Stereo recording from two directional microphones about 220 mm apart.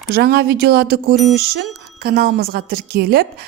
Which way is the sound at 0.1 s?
45° right (ahead or behind).